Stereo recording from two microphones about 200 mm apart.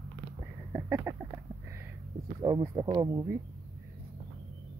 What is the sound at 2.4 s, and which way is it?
Speech, 20° right (ahead or behind).